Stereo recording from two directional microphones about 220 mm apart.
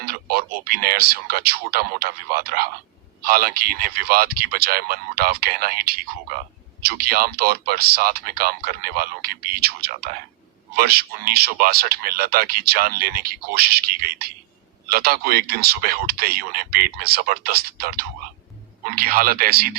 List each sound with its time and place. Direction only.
0.0 s speech: 45° right (ahead or behind)